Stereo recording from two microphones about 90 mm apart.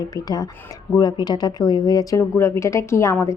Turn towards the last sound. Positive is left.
turn(degrees=35)  # may be behind; listen again after turning